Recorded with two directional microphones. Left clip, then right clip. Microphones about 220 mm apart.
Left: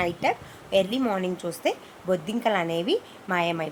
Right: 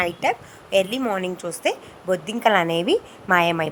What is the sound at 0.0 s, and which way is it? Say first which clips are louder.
A woman's voice: right 3 dB; 15° right (ahead or behind).